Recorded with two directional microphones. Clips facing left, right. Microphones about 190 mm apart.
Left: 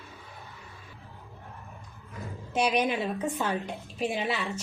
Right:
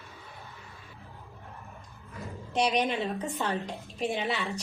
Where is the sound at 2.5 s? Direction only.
5° left (ahead or behind).